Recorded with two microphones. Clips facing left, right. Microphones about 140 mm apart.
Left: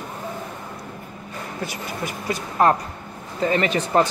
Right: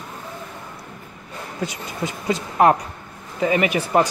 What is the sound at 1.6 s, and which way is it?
Speech, 20° right (ahead or behind).